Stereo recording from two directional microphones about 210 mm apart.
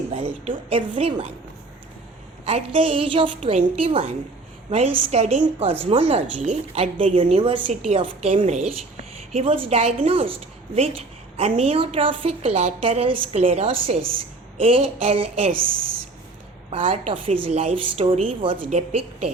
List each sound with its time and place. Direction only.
0.1 s a woman's voice: 30° right (ahead or behind)
2.4 s a woman's voice: 30° right (ahead or behind)
11.3 s a woman's voice: 30° right (ahead or behind)
16.6 s a woman's voice: 25° right (ahead or behind)